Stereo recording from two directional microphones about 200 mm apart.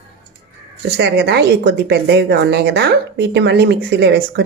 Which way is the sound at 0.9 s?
55° right (ahead or behind).